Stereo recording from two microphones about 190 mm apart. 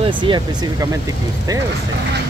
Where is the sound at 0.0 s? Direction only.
25° right (ahead or behind).